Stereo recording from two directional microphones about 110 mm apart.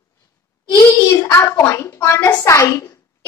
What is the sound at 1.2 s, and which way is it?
A woman's voice, 25° left (ahead or behind).